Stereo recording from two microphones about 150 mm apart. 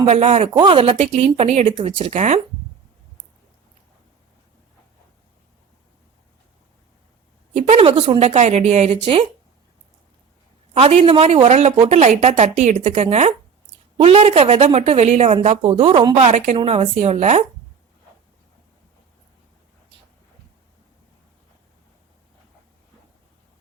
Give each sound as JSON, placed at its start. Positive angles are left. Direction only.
{"t": 0.0, "sound": "speech", "side_deg": -45}
{"t": 7.5, "sound": "speech", "side_deg": -45}
{"t": 10.8, "sound": "speech", "side_deg": -40}
{"t": 15.7, "sound": "speech", "side_deg": -40}